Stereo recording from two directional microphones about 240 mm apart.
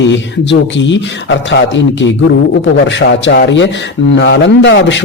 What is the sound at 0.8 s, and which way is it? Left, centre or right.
A man's voice, left.